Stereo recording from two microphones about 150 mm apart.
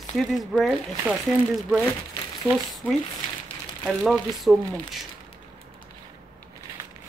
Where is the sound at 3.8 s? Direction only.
Centre (ahead or behind).